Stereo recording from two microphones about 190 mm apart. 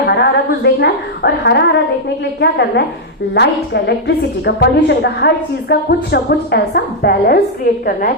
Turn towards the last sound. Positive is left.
turn(degrees=55)  # may be behind; listen again after turning